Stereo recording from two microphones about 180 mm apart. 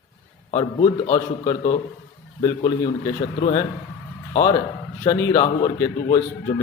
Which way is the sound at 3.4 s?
35° left (ahead or behind).